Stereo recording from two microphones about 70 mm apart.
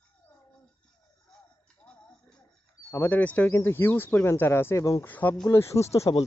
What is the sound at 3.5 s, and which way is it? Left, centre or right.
Speech, left.